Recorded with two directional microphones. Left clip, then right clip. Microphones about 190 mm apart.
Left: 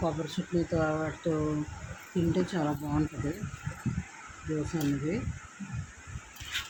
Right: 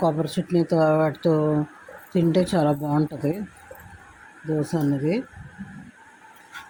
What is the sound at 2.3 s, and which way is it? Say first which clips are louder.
Speech: right 10 dB; 40° right (ahead or behind).